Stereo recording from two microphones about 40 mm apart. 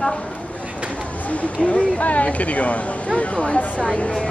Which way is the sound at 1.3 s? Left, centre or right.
Left.